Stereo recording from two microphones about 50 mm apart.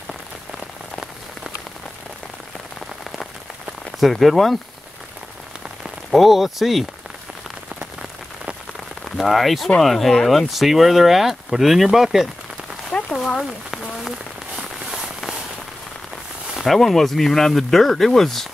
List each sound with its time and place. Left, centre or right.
4.0 s speech: centre
6.1 s speech: centre
9.1 s speech: centre
12.9 s a sound: left
13.4 s speech: centre
14.9 s a sound: centre
16.6 s speech: centre